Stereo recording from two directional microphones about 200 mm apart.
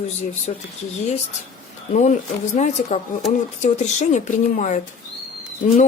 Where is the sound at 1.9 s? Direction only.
35° left (ahead or behind).